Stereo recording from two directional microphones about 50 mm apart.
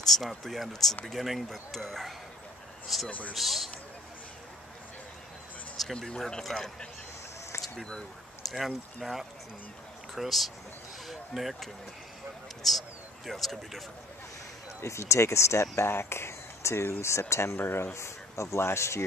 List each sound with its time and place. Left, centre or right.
0.0 s speech: centre
3.1 s speech: left
3.3 s speech: centre
5.9 s speech: centre
7.7 s speech: centre
8.5 s speech: centre
14.8 s speech: left
17.0 s speech: left
17.6 s speech: left
17.9 s speech: left